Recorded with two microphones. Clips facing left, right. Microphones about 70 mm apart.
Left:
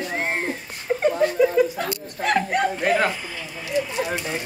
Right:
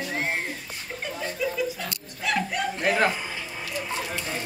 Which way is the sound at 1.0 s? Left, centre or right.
Left.